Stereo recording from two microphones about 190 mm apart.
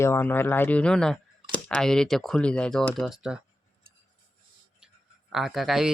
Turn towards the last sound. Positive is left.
turn(degrees=0)  # may be behind; listen again after turning